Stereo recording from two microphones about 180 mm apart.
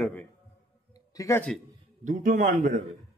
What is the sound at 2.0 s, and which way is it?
Speech, 45° right (ahead or behind).